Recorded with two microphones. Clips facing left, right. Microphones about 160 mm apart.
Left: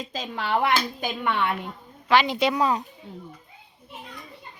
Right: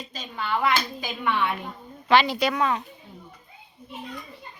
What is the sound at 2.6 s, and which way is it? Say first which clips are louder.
Speech: left 2 dB; 35° left (ahead or behind).